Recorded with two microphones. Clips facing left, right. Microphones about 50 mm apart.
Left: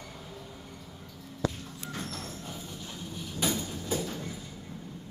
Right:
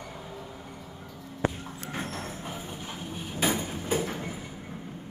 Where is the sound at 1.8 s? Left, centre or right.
Right.